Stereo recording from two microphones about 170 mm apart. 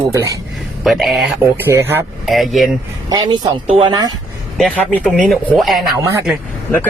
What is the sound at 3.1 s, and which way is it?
Speech, 25° right (ahead or behind).